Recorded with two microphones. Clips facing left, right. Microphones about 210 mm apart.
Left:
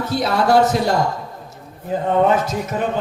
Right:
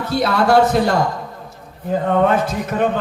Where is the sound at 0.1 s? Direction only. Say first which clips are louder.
Right 2 dB; 55° right (ahead or behind).